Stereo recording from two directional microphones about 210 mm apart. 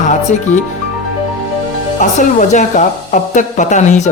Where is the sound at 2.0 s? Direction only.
35° left (ahead or behind).